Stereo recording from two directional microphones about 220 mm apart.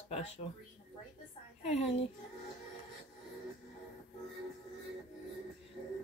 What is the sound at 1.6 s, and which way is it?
Speech, 30° left (ahead or behind).